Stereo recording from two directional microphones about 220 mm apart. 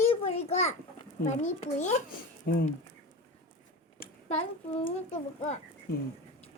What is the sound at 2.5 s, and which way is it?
Speech, 45° left (ahead or behind).